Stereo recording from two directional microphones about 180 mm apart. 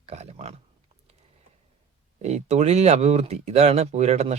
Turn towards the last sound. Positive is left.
turn(degrees=-40)  # may be behind; listen again after turning